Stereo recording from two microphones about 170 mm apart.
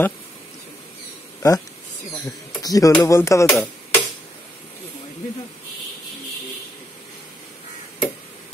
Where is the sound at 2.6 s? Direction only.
20° left (ahead or behind).